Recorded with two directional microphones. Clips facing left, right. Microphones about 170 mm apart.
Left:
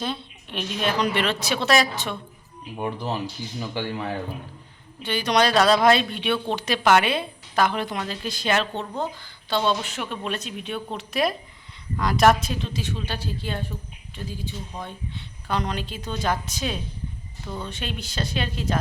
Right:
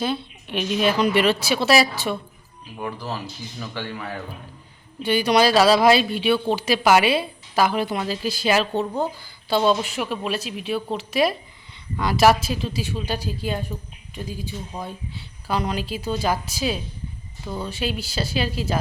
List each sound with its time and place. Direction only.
0.0 s a woman's voice: 5° right (ahead or behind)
2.7 s speech: 20° left (ahead or behind)
5.0 s a woman's voice: 10° right (ahead or behind)